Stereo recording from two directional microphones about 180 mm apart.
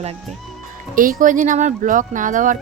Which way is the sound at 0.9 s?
50° right (ahead or behind).